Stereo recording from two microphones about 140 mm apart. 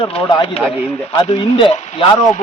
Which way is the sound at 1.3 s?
35° left (ahead or behind).